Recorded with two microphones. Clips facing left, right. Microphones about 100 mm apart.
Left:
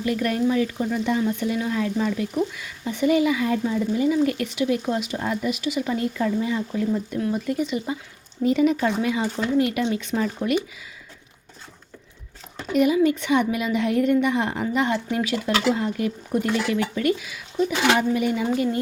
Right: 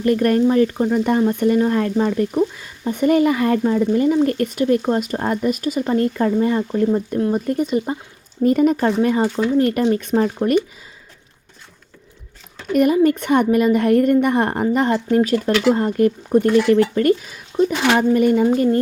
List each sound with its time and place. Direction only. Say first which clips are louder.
0.0 s speech: right 7 dB; 50° right (ahead or behind)
2.5 s speech: right 5 dB; 35° right (ahead or behind)
2.9 s speech: right 4 dB; 50° right (ahead or behind)
12.7 s speech: right 4 dB; 50° right (ahead or behind)